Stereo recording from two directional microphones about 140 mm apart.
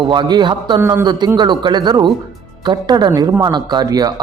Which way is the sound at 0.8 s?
15° right (ahead or behind).